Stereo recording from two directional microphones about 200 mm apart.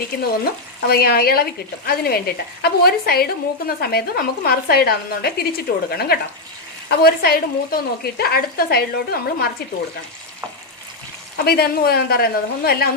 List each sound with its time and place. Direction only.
0.8 s speech: 50° left (ahead or behind)
11.4 s speech: 50° left (ahead or behind)